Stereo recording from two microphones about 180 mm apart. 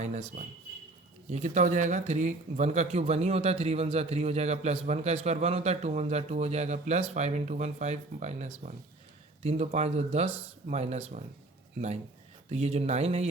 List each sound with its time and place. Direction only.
0.0 s speech: 40° right (ahead or behind)
12.5 s speech: 35° right (ahead or behind)